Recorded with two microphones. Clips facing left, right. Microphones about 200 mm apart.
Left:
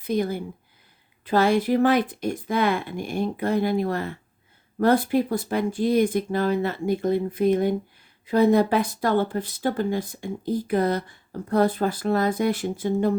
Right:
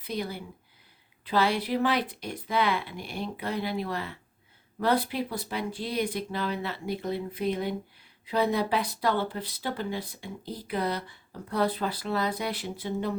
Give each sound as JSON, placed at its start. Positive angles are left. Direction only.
{"t": 0.0, "sound": "speech", "side_deg": 50}